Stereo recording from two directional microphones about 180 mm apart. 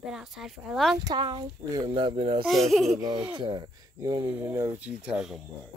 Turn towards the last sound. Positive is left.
turn(degrees=-5)  # may be behind; listen again after turning